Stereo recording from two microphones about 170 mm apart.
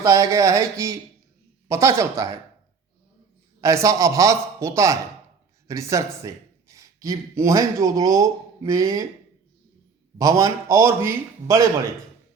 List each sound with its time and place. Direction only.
0.0 s a man's voice: 20° right (ahead or behind)
3.6 s a man's voice: 20° right (ahead or behind)
10.2 s a man's voice: 20° right (ahead or behind)